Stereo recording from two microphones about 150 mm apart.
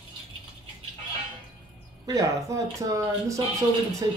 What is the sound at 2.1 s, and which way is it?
Speech, 20° right (ahead or behind).